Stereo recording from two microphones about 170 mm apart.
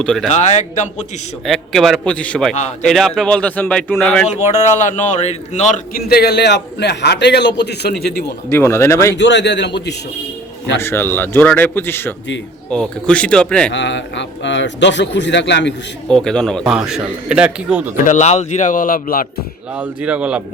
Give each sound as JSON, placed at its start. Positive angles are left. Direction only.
{"t": 0.0, "sound": "a man's voice", "side_deg": 5}
{"t": 0.3, "sound": "speech", "side_deg": 45}
{"t": 1.5, "sound": "a man's voice", "side_deg": 0}
{"t": 4.5, "sound": "speech", "side_deg": 45}
{"t": 6.1, "sound": "a man's voice", "side_deg": 65}
{"t": 8.4, "sound": "a man's voice", "side_deg": 15}
{"t": 9.1, "sound": "a man's voice", "side_deg": 90}
{"t": 10.8, "sound": "a man's voice", "side_deg": 10}
{"t": 13.7, "sound": "a man's voice", "side_deg": 90}
{"t": 16.0, "sound": "a man's voice", "side_deg": 5}
{"t": 18.0, "sound": "speech", "side_deg": 45}
{"t": 19.7, "sound": "speech", "side_deg": -10}